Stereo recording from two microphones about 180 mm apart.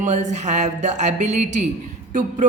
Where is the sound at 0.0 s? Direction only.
40° right (ahead or behind).